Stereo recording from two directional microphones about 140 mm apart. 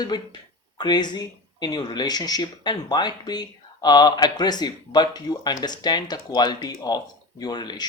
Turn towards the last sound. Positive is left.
turn(degrees=30)  # may be behind; listen again after turning